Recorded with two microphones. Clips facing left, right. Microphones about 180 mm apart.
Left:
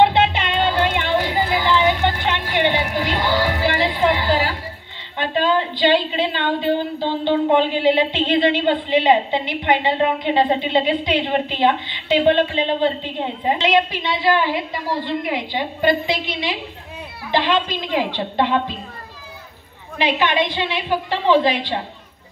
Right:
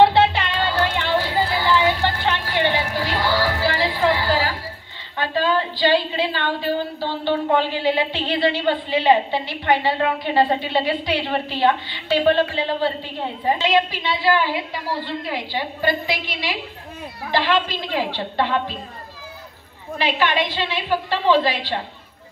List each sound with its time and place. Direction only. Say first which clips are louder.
0.0 s music: right 1 dB; 20° left (ahead or behind)
5.1 s a woman's voice: left 2 dB; 20° left (ahead or behind)
20.0 s a woman's voice: left 2 dB; 20° left (ahead or behind)